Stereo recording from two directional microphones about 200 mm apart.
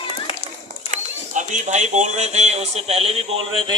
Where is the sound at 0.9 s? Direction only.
40° right (ahead or behind).